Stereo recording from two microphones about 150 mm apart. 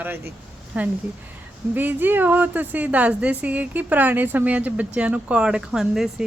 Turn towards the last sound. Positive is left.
turn(degrees=-5)  # may be behind; listen again after turning